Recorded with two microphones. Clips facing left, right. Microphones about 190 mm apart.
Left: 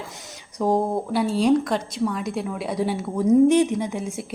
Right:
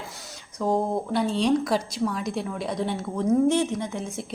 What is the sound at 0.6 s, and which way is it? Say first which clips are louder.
Speech: left 3 dB; 15° left (ahead or behind).